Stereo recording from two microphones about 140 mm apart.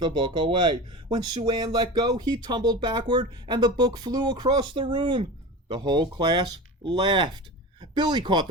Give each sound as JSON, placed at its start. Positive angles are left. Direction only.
{"t": 0.0, "sound": "speech", "side_deg": -35}